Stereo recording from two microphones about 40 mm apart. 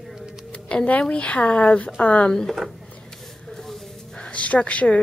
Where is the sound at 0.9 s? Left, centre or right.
Left.